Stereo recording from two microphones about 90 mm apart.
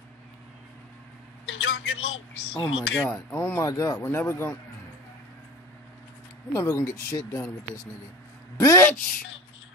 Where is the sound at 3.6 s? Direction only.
40° left (ahead or behind).